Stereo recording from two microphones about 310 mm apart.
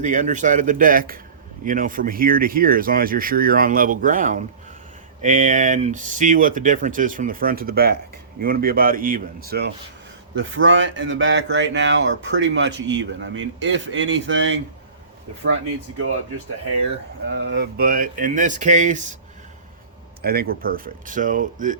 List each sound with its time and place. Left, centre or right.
0.0 s speech: right
17.3 s speech: right
20.2 s speech: right